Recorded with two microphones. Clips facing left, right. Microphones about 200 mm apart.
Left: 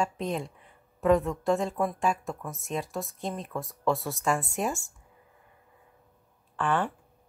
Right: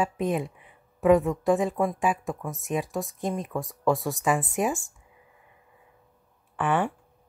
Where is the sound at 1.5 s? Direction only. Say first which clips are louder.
Right 3 dB; 15° right (ahead or behind).